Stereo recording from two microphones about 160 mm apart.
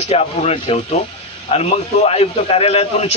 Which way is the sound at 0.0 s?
40° left (ahead or behind).